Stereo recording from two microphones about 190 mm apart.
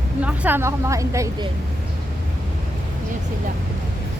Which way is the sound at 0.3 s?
10° right (ahead or behind).